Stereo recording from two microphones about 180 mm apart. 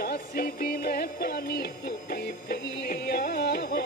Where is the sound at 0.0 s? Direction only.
60° left (ahead or behind).